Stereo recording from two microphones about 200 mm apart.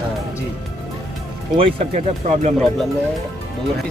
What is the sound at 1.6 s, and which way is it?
Speech, 30° right (ahead or behind).